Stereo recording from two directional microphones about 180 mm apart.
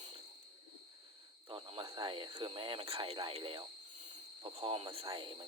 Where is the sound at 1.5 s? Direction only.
30° right (ahead or behind).